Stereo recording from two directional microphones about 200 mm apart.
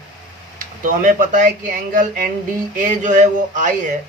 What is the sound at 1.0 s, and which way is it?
Speech, 40° right (ahead or behind).